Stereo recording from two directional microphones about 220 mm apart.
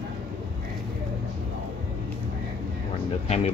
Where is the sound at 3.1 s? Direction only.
30° left (ahead or behind).